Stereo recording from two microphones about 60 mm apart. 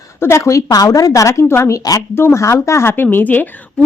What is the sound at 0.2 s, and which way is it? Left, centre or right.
A woman's voice, left.